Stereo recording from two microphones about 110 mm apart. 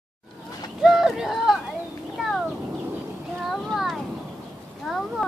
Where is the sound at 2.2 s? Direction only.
5° right (ahead or behind).